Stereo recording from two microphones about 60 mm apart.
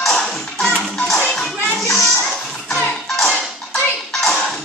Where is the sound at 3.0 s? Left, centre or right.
Centre.